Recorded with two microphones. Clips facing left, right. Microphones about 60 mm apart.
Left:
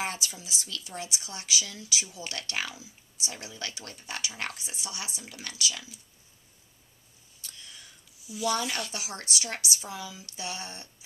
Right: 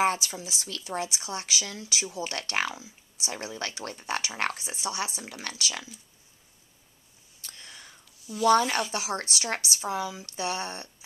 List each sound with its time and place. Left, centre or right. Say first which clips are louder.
0.0 s speech: right 9 dB; right
7.4 s whispering: right 2 dB; right
8.5 s speech: right 8 dB; right